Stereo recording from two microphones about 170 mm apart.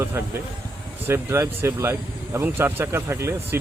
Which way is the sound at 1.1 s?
15° right (ahead or behind).